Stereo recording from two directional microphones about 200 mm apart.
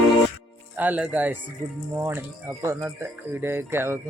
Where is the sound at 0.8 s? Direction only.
5° right (ahead or behind).